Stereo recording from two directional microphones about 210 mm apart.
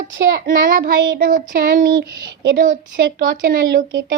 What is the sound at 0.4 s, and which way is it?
Speech, 50° right (ahead or behind).